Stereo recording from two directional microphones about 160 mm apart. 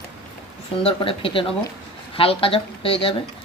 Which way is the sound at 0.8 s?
35° left (ahead or behind).